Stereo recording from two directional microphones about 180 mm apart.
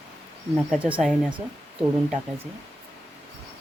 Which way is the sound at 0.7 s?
5° right (ahead or behind).